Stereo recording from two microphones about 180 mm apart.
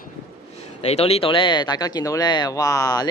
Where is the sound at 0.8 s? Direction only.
35° left (ahead or behind).